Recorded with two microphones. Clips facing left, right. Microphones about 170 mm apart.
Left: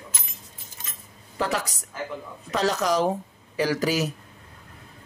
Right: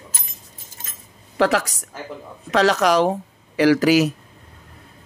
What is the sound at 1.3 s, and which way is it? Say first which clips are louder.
A woman's voice: right 8 dB; 75° right (ahead or behind).